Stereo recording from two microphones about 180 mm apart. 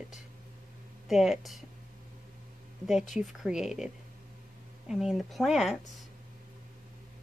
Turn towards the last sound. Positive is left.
turn(degrees=0)  # may be behind; listen again after turning